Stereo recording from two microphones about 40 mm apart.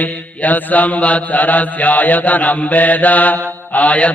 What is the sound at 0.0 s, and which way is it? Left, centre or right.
Mantra, left.